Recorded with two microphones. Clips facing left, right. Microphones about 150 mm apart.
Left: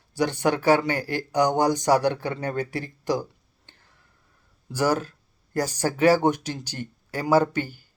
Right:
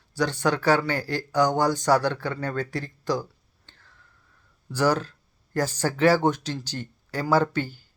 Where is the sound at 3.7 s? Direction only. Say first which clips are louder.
Even; 15° left (ahead or behind).